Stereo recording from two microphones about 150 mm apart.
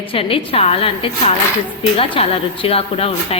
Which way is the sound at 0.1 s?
40° left (ahead or behind).